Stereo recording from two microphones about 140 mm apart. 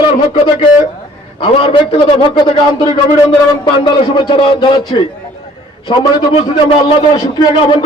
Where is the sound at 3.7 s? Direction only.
35° left (ahead or behind).